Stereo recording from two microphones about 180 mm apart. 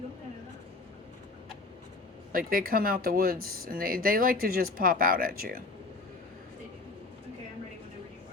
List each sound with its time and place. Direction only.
2.3 s speech: 55° right (ahead or behind)